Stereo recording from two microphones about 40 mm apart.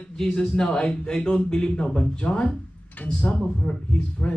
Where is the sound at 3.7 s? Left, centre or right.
Left.